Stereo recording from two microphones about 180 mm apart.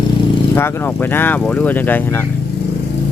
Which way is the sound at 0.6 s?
15° left (ahead or behind).